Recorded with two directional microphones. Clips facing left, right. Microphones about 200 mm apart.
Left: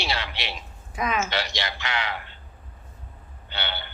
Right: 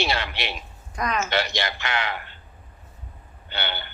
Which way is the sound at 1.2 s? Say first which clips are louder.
Right 4 dB; 55° right (ahead or behind).